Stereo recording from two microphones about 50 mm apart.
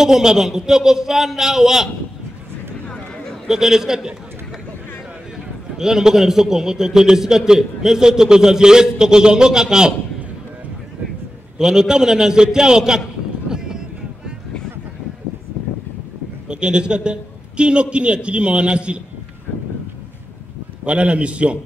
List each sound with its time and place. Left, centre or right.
0.0 s a man's voice: centre
3.4 s a man's voice: centre
5.8 s a man's voice: centre
11.5 s a man's voice: centre
13.5 s boat: centre
16.4 s a man's voice: centre
20.8 s a man's voice: right